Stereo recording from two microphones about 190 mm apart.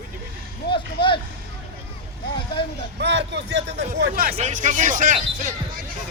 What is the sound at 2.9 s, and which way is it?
Speech, 65° right (ahead or behind).